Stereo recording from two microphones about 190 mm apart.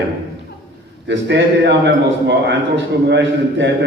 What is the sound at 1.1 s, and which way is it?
A man's voice, 70° right (ahead or behind).